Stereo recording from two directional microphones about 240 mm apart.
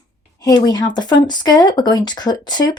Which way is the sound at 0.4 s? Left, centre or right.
Centre.